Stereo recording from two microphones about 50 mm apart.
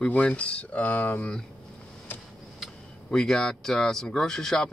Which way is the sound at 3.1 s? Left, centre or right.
Centre.